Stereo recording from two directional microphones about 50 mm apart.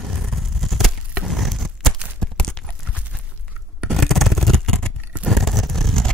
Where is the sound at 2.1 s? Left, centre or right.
Centre.